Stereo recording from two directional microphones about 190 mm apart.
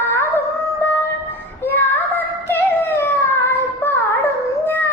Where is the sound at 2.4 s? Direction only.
10° left (ahead or behind).